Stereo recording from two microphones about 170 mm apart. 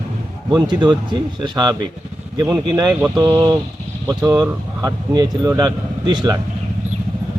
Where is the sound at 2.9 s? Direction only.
10° right (ahead or behind).